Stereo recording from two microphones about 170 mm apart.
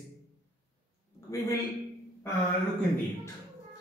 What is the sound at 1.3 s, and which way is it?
Speech, 20° left (ahead or behind).